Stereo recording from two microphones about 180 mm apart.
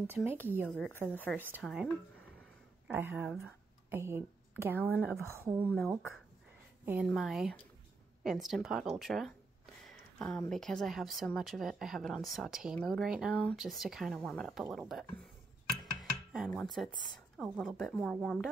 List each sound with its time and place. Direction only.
0.0 s a woman's voice: 10° right (ahead or behind)
0.7 s a woman's voice: 10° left (ahead or behind)
1.6 s speech: centre (ahead or behind)
2.9 s a woman's voice: 10° right (ahead or behind)
7.1 s speech: centre (ahead or behind)
15.7 s dishes: centre (ahead or behind)
17.4 s speech: centre (ahead or behind)